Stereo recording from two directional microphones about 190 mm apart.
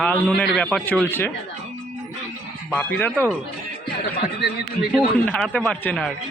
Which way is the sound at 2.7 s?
5° left (ahead or behind).